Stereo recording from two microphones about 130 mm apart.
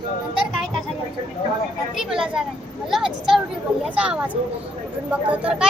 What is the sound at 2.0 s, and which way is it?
A woman's voice, 5° right (ahead or behind).